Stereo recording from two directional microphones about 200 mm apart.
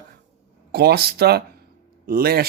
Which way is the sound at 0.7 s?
50° right (ahead or behind).